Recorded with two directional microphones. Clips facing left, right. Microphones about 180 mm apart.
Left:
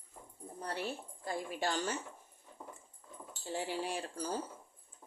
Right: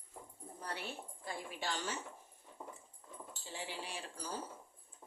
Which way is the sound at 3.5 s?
45° left (ahead or behind).